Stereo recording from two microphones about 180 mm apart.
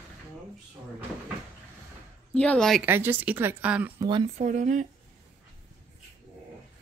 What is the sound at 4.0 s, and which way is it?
Speech, 25° right (ahead or behind).